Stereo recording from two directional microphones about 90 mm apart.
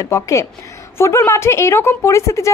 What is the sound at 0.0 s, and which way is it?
A woman's voice, 35° left (ahead or behind).